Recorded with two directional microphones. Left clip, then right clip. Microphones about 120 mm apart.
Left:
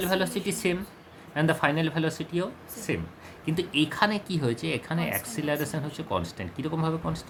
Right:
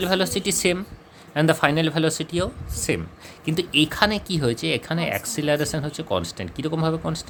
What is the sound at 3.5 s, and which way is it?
Speech, 80° right.